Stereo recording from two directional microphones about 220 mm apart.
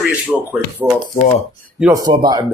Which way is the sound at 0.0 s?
5° right (ahead or behind).